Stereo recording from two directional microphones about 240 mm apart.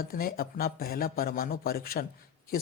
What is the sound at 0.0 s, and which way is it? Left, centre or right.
Speech, left.